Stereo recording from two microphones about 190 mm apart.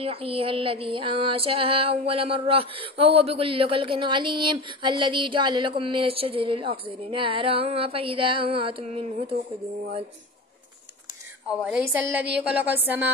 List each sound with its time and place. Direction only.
0.0 s music: 30° right (ahead or behind)
11.6 s a woman's voice: 5° right (ahead or behind)